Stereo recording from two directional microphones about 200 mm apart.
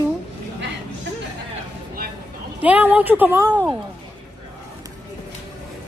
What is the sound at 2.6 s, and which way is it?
Speech, 5° right (ahead or behind).